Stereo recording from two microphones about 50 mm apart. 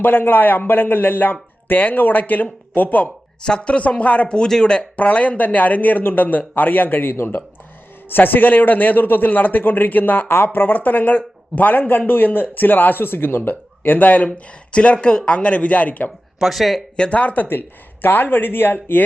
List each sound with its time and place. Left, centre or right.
0.0 s a man's voice: left
3.4 s speech: centre
4.4 s speech: centre
4.7 s a man's voice: left
16.4 s speech: centre
17.0 s speech: left
17.5 s a man's voice: left